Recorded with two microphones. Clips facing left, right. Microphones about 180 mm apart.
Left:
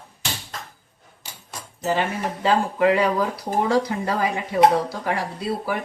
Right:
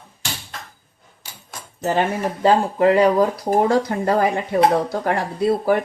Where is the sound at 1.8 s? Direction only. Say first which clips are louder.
Right 3 dB; 45° right (ahead or behind).